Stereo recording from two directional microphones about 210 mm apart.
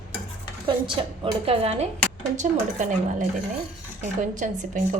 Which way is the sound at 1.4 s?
30° right (ahead or behind).